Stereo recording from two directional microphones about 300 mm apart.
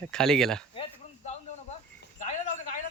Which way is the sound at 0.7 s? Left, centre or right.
Centre.